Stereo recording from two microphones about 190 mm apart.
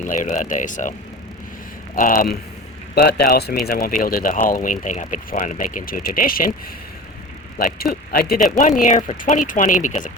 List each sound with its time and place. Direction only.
0.0 s speech: 45° left (ahead or behind)
2.0 s speech: 45° left (ahead or behind)
7.6 s speech: 50° left (ahead or behind)